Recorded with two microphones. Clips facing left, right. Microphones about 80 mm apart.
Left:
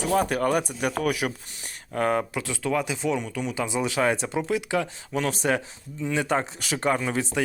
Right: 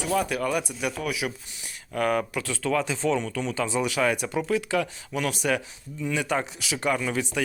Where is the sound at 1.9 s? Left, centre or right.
Left.